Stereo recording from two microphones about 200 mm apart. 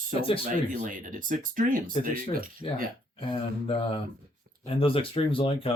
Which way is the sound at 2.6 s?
30° left (ahead or behind).